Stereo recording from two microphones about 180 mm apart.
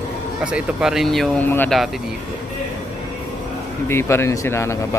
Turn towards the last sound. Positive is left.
turn(degrees=15)  # may be behind; listen again after turning